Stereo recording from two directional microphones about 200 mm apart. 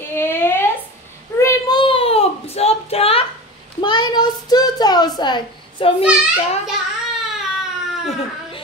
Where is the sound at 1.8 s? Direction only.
30° left (ahead or behind).